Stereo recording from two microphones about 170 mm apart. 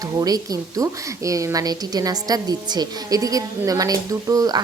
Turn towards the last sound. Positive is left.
turn(degrees=-20)  # may be behind; listen again after turning